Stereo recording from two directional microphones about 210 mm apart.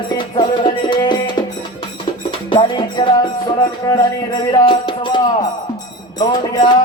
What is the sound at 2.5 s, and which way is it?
Music, 25° left (ahead or behind).